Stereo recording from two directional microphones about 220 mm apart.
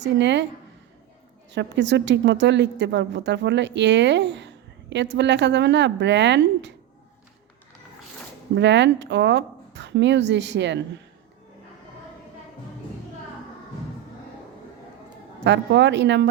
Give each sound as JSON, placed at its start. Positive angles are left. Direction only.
{"t": 0.0, "sound": "a woman's voice", "side_deg": -55}
{"t": 1.5, "sound": "a woman's voice", "side_deg": -55}
{"t": 8.5, "sound": "a woman's voice", "side_deg": -55}
{"t": 15.4, "sound": "a woman's voice", "side_deg": -55}